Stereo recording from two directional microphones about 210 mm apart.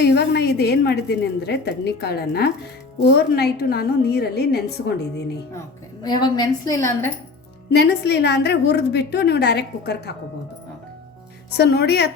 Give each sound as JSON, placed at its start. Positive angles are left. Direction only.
{"t": 0.0, "sound": "a woman's voice", "side_deg": 50}
{"t": 5.5, "sound": "a woman's voice", "side_deg": 20}
{"t": 7.7, "sound": "a woman's voice", "side_deg": 50}
{"t": 11.5, "sound": "a woman's voice", "side_deg": 50}